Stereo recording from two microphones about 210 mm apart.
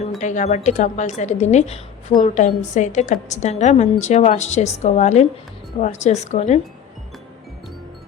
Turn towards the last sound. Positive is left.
turn(degrees=35)  # may be behind; listen again after turning